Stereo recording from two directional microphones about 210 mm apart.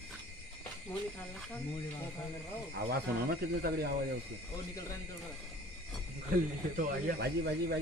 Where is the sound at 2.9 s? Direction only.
50° right (ahead or behind).